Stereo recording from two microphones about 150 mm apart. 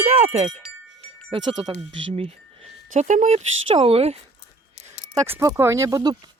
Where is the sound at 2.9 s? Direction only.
55° right (ahead or behind).